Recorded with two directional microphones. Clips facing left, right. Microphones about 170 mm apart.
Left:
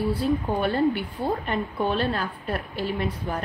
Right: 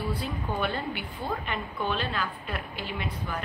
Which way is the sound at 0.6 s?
40° left (ahead or behind).